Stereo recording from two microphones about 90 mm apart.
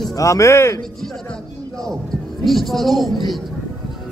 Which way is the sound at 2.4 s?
Centre (ahead or behind).